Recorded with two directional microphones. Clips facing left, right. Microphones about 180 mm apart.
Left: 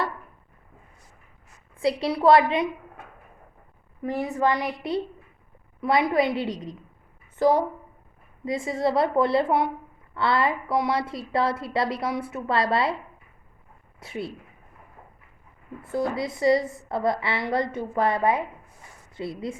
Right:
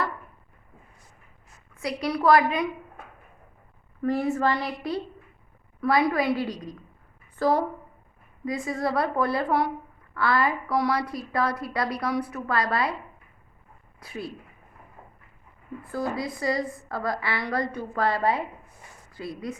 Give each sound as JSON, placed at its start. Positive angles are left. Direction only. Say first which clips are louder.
{"t": 1.7, "sound": "a woman's voice", "louder": "left 4 dB", "side_deg": 30}
{"t": 4.0, "sound": "a woman's voice", "louder": "right 1 dB", "side_deg": 20}
{"t": 14.0, "sound": "a woman's voice", "louder": "left 3 dB", "side_deg": 25}
{"t": 15.8, "sound": "a woman's voice", "louder": "left 3 dB", "side_deg": 25}